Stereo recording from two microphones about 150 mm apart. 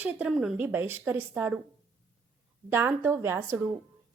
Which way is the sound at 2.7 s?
15° right (ahead or behind).